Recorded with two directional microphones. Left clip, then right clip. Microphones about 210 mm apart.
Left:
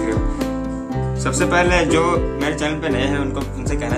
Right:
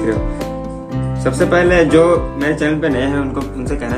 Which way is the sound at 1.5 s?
15° left (ahead or behind).